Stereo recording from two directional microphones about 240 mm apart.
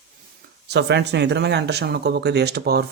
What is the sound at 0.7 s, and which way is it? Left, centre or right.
Speech, right.